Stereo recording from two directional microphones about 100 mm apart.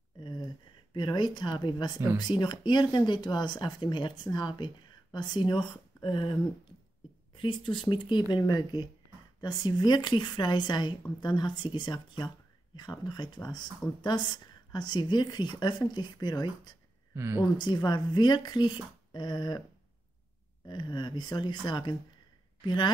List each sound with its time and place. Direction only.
0.2 s a sound: 45° left (ahead or behind)
0.9 s a woman's voice: 45° left (ahead or behind)
7.3 s a woman's voice: 50° left (ahead or behind)
17.1 s speech: 25° right (ahead or behind)
17.4 s a woman's voice: 45° left (ahead or behind)
20.6 s a woman's voice: 45° left (ahead or behind)